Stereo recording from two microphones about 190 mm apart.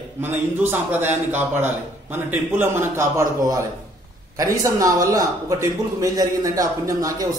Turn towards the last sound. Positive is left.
turn(degrees=-20)  # may be behind; listen again after turning